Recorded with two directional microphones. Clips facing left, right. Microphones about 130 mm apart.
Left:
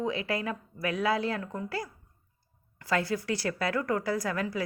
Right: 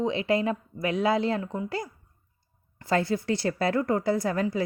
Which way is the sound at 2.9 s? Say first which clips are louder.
Right 4 dB; 25° right (ahead or behind).